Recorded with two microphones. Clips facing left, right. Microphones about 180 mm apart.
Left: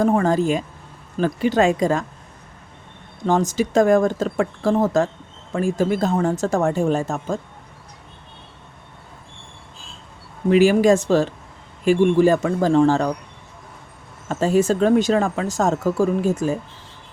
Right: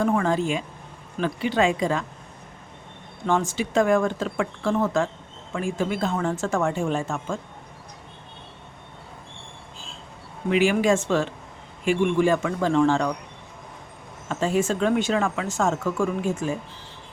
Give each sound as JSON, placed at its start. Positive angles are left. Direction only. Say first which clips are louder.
{"t": 0.0, "sound": "speech", "louder": "left 4 dB", "side_deg": 40}
{"t": 3.2, "sound": "speech", "louder": "left 5 dB", "side_deg": 40}
{"t": 10.5, "sound": "speech", "louder": "left 6 dB", "side_deg": 40}
{"t": 14.3, "sound": "speech", "louder": "left 5 dB", "side_deg": 40}